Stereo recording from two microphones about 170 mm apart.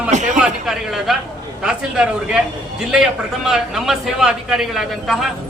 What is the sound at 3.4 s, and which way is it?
A man's voice, centre (ahead or behind).